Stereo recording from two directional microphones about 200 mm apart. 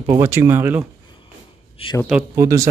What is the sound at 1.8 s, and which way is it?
Speech, 30° left (ahead or behind).